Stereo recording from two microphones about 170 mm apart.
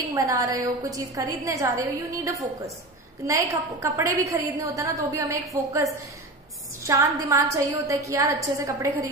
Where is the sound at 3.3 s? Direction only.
15° right (ahead or behind).